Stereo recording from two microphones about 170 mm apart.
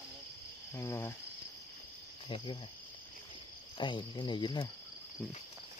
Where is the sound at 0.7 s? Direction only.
15° left (ahead or behind).